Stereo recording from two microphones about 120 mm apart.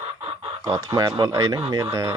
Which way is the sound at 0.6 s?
25° right (ahead or behind).